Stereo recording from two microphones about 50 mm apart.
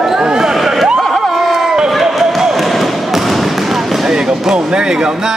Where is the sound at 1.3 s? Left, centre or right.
Centre.